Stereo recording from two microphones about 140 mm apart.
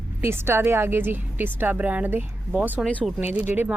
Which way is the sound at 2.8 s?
Centre (ahead or behind).